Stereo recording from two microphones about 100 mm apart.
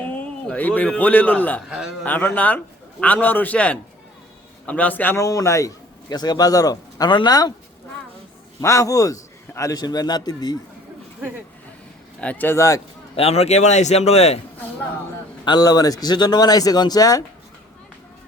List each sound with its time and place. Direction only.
0.0 s a man's voice: 15° left (ahead or behind)
5.1 s a man's voice: 35° left (ahead or behind)
7.1 s speech: 55° left (ahead or behind)
8.6 s speech: 35° left (ahead or behind)
12.2 s a man's voice: 15° left (ahead or behind)
12.5 s speech: 30° left (ahead or behind)
13.1 s a man's voice: 85° left
15.4 s speech: 45° left (ahead or behind)